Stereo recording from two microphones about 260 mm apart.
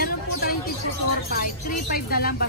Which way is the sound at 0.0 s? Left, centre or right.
Left.